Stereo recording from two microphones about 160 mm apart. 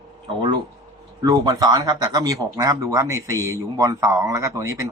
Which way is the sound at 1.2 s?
25° right (ahead or behind).